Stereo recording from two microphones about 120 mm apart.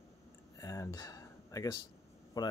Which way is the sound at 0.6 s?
30° left (ahead or behind).